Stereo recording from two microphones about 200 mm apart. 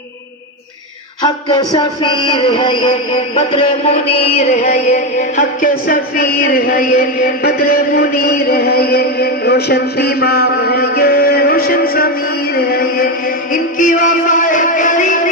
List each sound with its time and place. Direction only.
1.2 s a man's voice: 20° left (ahead or behind); by 12.1 s 50° left (ahead or behind)
12.5 s music: 50° left (ahead or behind)